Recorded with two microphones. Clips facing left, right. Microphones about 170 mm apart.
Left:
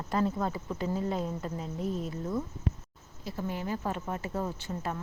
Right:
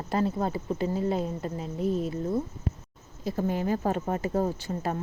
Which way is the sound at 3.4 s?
45° right (ahead or behind).